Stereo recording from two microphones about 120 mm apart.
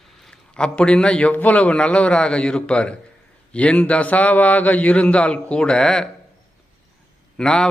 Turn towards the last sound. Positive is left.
turn(degrees=5)  # may be behind; listen again after turning